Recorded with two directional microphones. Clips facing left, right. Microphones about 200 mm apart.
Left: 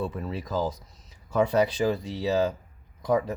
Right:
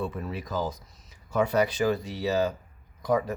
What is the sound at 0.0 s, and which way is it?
Speech, 30° left (ahead or behind).